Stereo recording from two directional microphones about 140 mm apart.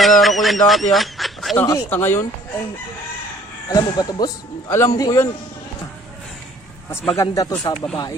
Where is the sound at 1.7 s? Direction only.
15° left (ahead or behind).